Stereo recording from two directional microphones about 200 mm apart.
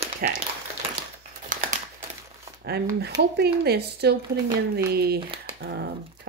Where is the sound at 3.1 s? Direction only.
50° right (ahead or behind).